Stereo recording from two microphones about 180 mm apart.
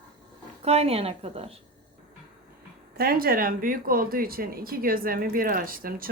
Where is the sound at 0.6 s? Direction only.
35° right (ahead or behind).